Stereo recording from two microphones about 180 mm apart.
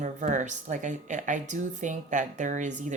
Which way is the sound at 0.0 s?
45° right (ahead or behind).